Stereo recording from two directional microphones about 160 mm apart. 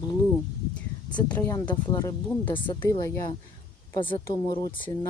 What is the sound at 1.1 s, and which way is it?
Speech, 10° left (ahead or behind).